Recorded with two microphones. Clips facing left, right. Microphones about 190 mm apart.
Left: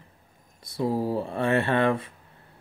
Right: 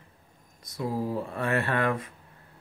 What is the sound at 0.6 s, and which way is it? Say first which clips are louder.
Speech: left 4 dB; 30° left (ahead or behind).